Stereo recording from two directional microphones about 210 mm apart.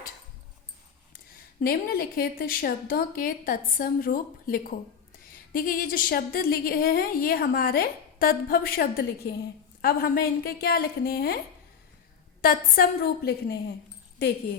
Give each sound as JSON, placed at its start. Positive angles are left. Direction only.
{"t": 1.6, "sound": "a woman's voice", "side_deg": 45}
{"t": 12.4, "sound": "a woman's voice", "side_deg": 45}